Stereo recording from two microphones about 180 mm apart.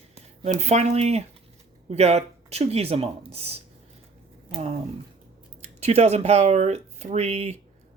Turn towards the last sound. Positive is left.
turn(degrees=-35)  # may be behind; listen again after turning